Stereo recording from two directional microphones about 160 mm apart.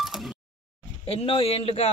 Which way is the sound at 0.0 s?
Centre (ahead or behind).